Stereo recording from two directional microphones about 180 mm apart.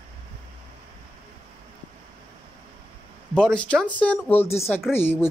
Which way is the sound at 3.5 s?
5° left (ahead or behind).